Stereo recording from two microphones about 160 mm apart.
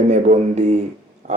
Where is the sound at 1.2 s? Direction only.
45° right (ahead or behind).